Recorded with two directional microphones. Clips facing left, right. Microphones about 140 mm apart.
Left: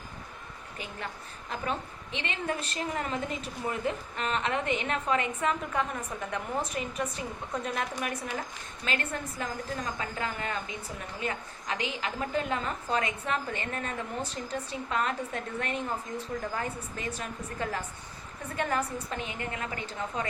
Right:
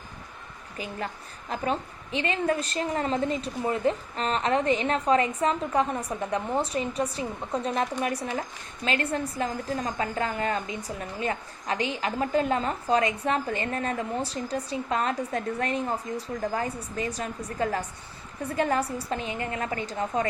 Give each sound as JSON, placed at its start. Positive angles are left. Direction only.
{"t": 0.8, "sound": "a woman's voice", "side_deg": -35}